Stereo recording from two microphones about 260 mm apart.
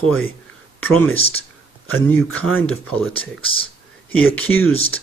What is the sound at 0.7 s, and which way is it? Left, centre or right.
Speech, centre.